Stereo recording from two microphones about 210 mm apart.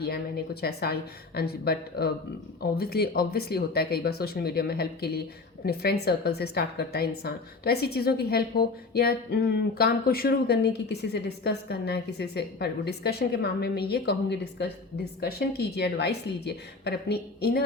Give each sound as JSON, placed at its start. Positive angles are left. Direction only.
{"t": 0.0, "sound": "a woman's voice", "side_deg": 50}